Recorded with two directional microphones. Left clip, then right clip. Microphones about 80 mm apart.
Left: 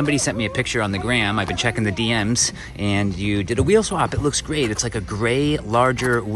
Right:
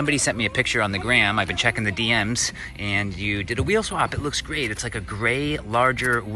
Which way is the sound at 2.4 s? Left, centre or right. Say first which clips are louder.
Left 3 dB; left.